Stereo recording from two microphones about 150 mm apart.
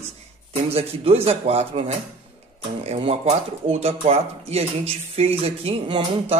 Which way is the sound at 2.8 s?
40° right (ahead or behind).